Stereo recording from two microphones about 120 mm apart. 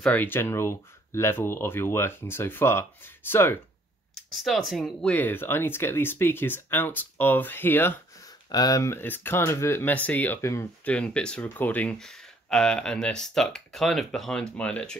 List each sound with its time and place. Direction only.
0.0 s speech: 15° left (ahead or behind)
4.4 s speech: centre (ahead or behind); by 8.0 s 15° left (ahead or behind)
8.5 s speech: 30° left (ahead or behind)
10.9 s speech: 10° left (ahead or behind)